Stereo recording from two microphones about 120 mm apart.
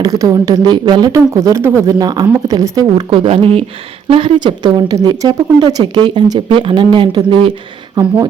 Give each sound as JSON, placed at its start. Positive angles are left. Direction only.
{"t": 0.0, "sound": "speech", "side_deg": -30}
{"t": 2.0, "sound": "speech", "side_deg": -35}
{"t": 3.1, "sound": "speech", "side_deg": -50}